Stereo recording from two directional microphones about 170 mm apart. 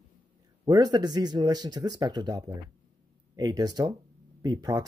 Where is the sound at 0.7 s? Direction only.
25° right (ahead or behind).